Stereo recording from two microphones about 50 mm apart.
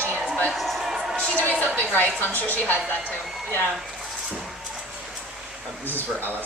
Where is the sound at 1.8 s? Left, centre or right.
Left.